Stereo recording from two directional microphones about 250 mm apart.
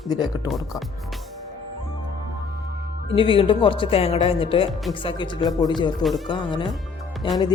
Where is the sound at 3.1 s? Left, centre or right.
Left.